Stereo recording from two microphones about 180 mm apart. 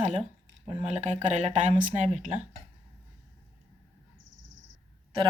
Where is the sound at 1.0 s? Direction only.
40° right (ahead or behind).